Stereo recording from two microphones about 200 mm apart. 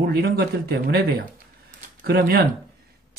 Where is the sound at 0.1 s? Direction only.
50° right (ahead or behind).